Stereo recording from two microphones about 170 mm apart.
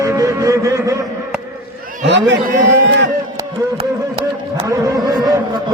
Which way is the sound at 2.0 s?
90° right.